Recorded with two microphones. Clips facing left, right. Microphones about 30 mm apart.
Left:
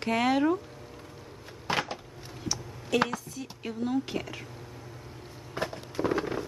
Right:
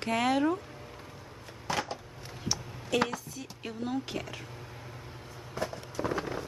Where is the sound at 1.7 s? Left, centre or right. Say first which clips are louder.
Left 3 dB; left.